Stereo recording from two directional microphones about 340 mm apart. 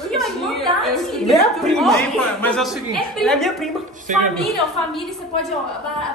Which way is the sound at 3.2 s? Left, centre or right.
Centre.